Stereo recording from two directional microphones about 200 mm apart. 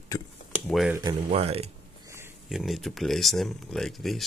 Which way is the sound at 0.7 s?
Centre (ahead or behind).